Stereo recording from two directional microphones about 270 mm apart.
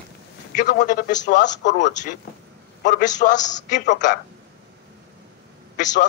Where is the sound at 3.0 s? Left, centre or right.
Left.